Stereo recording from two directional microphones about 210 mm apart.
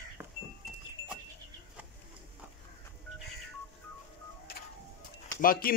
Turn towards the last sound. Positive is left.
turn(degrees=40)  # may be behind; listen again after turning